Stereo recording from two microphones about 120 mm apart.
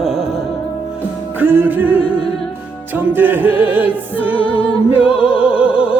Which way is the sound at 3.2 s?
15° right (ahead or behind).